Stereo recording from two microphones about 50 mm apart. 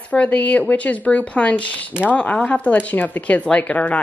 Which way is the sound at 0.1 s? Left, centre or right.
Left.